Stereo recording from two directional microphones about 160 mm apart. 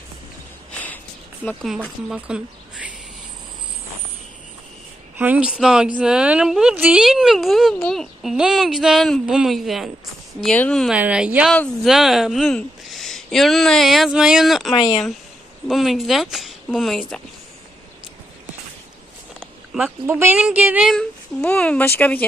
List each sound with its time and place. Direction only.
0.7 s sniff: 10° left (ahead or behind)
1.7 s a woman's voice: 5° right (ahead or behind)
5.1 s a woman's voice: 10° right (ahead or behind)
11.0 s a woman's voice: 10° right (ahead or behind)
11.5 s a woman's voice: 5° left (ahead or behind)
14.7 s speech: 25° left (ahead or behind)
15.7 s a woman's voice: centre (ahead or behind)
19.4 s a sound: 5° right (ahead or behind)
20.1 s a woman's voice: 15° right (ahead or behind)
20.9 s speech: 5° left (ahead or behind)